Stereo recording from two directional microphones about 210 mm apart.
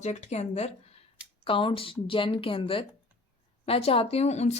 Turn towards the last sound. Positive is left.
turn(degrees=30)  # may be behind; listen again after turning